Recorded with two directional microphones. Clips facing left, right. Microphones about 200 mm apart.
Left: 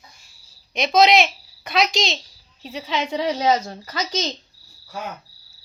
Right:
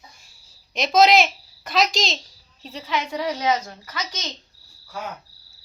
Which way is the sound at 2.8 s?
25° left (ahead or behind).